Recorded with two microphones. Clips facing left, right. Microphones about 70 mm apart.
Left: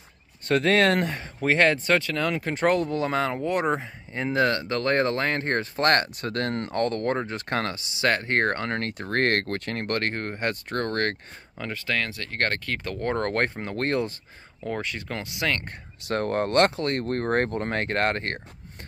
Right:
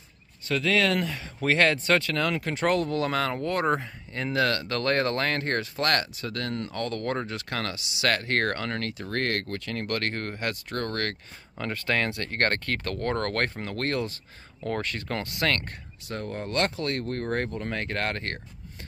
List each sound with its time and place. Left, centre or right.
0.5 s speech: left
1.4 s speech: left
5.8 s speech: left
8.9 s speech: left
11.5 s speech: centre
12.8 s speech: centre
14.6 s speech: centre
16.1 s speech: left